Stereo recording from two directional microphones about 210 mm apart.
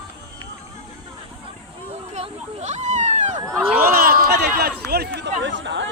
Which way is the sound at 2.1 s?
30° right (ahead or behind).